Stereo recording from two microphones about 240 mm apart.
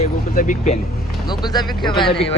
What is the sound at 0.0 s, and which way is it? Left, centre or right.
Vehicle, left.